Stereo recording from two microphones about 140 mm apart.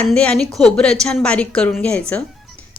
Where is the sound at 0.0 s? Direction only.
10° left (ahead or behind).